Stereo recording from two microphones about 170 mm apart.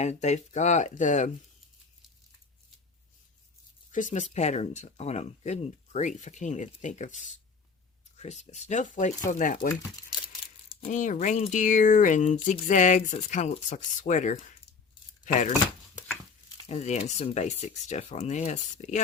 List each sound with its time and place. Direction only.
0.0 s speech: 40° left (ahead or behind)
3.9 s speech: 45° left (ahead or behind)
10.9 s speech: 45° left (ahead or behind)
16.6 s speech: 40° left (ahead or behind)